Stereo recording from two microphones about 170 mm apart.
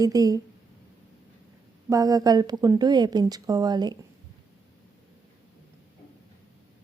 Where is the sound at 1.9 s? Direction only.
20° right (ahead or behind).